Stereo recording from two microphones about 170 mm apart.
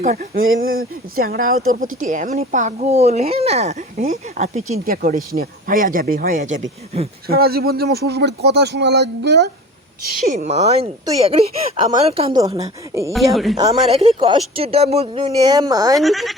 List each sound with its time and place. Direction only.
0.0 s speech: 50° right (ahead or behind)
4.9 s speech: 60° right (ahead or behind)
7.3 s speech: 65° right (ahead or behind); by 9.5 s 85° right
10.0 s speech: 60° right (ahead or behind); by 10.8 s 40° right (ahead or behind)
12.0 s speech: 35° right (ahead or behind)
12.9 s speech: 20° right (ahead or behind)
13.1 s speech: centre (ahead or behind)
13.8 s speech: 35° right (ahead or behind)
15.4 s speech: 20° right (ahead or behind)
16.0 s speech: centre (ahead or behind)